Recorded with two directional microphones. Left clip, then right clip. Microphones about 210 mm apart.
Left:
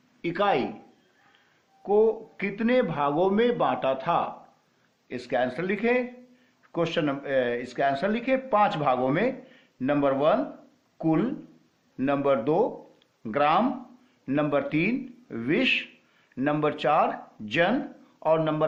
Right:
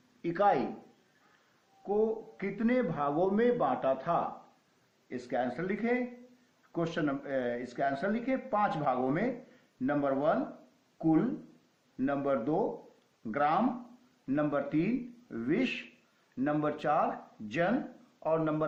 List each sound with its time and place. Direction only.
0.2 s a man's voice: 40° left (ahead or behind)
1.9 s a man's voice: 40° left (ahead or behind)
18.2 s a man's voice: 45° left (ahead or behind)